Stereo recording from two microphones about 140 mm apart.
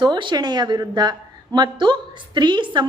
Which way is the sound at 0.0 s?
35° right (ahead or behind).